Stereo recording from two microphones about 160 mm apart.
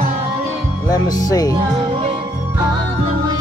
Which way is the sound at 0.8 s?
25° left (ahead or behind).